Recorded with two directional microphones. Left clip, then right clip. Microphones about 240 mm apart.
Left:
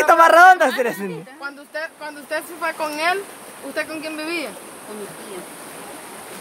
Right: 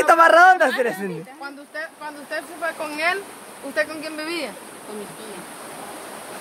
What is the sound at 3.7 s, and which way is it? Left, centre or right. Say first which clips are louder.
Speech: right 2 dB; centre.